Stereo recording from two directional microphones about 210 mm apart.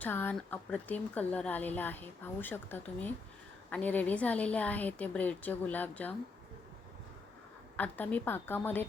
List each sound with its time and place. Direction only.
0.0 s speech: 10° left (ahead or behind)
7.8 s speech: 10° left (ahead or behind)